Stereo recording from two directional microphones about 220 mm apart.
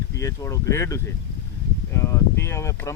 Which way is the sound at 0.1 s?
15° left (ahead or behind).